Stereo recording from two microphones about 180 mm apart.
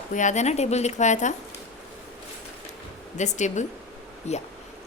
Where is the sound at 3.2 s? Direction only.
40° left (ahead or behind).